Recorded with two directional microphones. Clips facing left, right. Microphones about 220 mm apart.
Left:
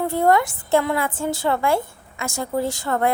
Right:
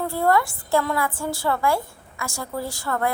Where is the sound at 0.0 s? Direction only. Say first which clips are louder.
Left 3 dB; 20° left (ahead or behind).